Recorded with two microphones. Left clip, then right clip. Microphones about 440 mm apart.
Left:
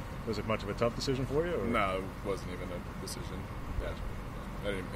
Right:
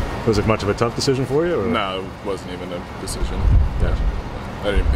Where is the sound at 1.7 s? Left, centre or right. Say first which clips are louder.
Right 9 dB; left.